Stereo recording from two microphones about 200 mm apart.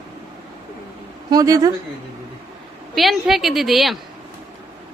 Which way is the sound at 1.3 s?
15° right (ahead or behind).